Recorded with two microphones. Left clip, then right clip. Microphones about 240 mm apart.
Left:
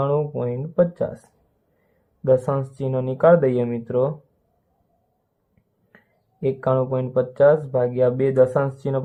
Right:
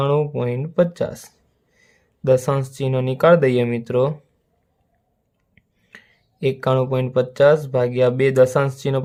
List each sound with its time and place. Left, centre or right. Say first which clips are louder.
0.0 s speech: right 2 dB; right
2.2 s speech: right 1 dB; right
6.4 s speech: right 2 dB; right